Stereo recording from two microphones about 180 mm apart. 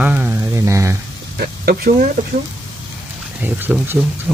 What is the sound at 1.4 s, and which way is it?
Speech, 60° right (ahead or behind).